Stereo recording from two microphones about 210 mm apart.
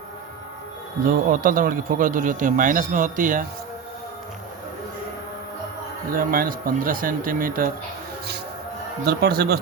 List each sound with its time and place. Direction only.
1.3 s speech: 40° right (ahead or behind)
6.1 s speech: 40° right (ahead or behind)
9.0 s speech: 50° right (ahead or behind)